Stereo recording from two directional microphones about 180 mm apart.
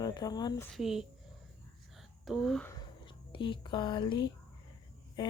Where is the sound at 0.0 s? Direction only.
25° left (ahead or behind).